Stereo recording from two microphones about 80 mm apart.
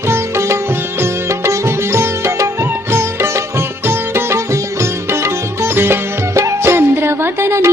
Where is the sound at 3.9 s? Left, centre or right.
Right.